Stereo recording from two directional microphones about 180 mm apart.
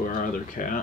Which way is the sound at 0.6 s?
45° left (ahead or behind).